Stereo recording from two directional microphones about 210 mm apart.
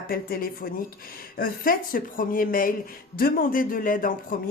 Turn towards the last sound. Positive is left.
turn(degrees=40)  # may be behind; listen again after turning